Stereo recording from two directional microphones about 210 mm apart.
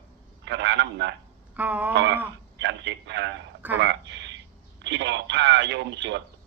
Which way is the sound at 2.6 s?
55° right (ahead or behind).